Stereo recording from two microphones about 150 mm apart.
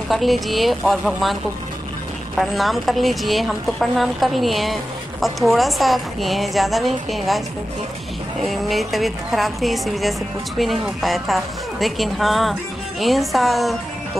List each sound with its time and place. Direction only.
0.1 s a woman's voice: centre (ahead or behind)
8.5 s a woman's voice: centre (ahead or behind)